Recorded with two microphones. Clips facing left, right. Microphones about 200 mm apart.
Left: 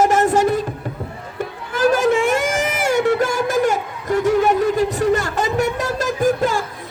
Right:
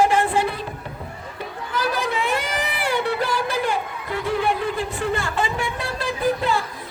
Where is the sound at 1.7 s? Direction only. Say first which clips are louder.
Left 9 dB; 45° left (ahead or behind).